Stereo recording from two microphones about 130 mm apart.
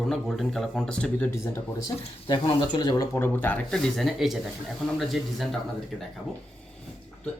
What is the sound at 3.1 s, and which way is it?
Speech, 15° left (ahead or behind).